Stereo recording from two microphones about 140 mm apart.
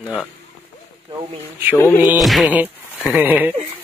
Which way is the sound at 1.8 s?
25° left (ahead or behind).